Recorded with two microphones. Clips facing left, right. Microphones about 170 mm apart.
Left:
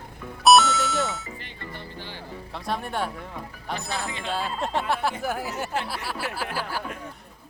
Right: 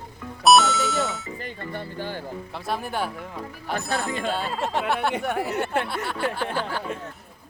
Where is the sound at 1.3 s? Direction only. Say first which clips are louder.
Right 6 dB; 50° right (ahead or behind).